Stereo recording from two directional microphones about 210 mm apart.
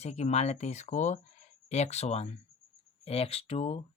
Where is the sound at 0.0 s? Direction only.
30° left (ahead or behind).